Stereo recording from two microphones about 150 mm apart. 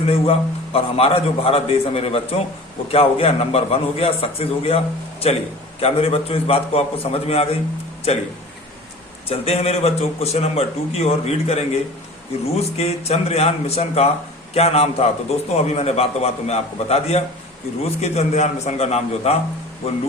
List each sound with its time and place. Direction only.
0.0 s a man's voice: 40° left (ahead or behind)
9.3 s a man's voice: 40° left (ahead or behind)